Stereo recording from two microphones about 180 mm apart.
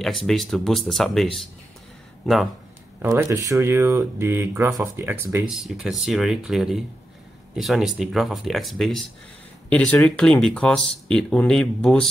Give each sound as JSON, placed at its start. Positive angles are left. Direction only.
{"t": 0.2, "sound": "speech", "side_deg": 0}
{"t": 3.0, "sound": "speech", "side_deg": -15}
{"t": 5.5, "sound": "speech", "side_deg": 0}